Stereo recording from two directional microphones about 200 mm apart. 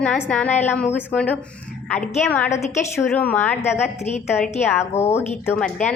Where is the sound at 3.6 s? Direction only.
35° left (ahead or behind).